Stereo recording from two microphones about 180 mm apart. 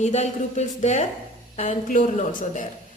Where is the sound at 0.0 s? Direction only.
40° left (ahead or behind).